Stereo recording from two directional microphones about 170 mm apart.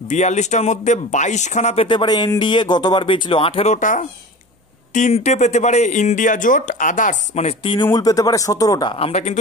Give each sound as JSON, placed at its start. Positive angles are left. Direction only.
{"t": 0.1, "sound": "speech", "side_deg": 45}
{"t": 1.9, "sound": "speech", "side_deg": 25}
{"t": 7.7, "sound": "speech", "side_deg": 25}
{"t": 8.9, "sound": "speech", "side_deg": 40}